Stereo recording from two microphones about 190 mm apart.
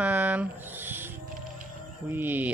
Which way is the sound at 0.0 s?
10° right (ahead or behind).